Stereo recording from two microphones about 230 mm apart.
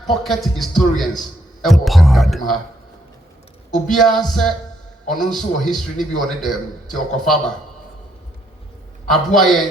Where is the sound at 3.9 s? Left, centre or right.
Centre.